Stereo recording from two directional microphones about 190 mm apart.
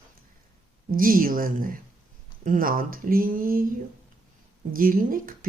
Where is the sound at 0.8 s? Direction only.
45° right (ahead or behind).